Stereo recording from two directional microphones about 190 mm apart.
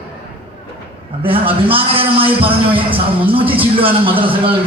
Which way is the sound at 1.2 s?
30° right (ahead or behind).